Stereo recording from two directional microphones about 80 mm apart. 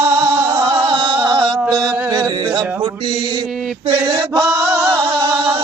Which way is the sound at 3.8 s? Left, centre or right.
Right.